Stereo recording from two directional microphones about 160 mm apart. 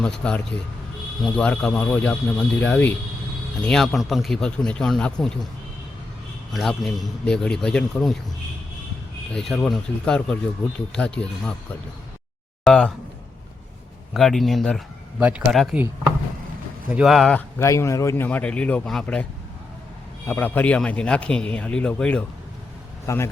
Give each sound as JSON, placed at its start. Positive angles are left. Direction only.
{"t": 0.0, "sound": "a man's voice", "side_deg": 5}
{"t": 6.5, "sound": "a man's voice", "side_deg": 0}
{"t": 9.3, "sound": "a man's voice", "side_deg": 0}
{"t": 12.6, "sound": "a man's voice", "side_deg": 5}
{"t": 14.1, "sound": "a man's voice", "side_deg": 0}
{"t": 16.9, "sound": "a man's voice", "side_deg": -5}
{"t": 17.6, "sound": "a man's voice", "side_deg": 20}
{"t": 20.2, "sound": "a man's voice", "side_deg": 10}
{"t": 23.0, "sound": "a man's voice", "side_deg": 15}